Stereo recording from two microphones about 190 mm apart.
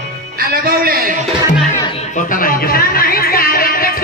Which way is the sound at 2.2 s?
45° left (ahead or behind).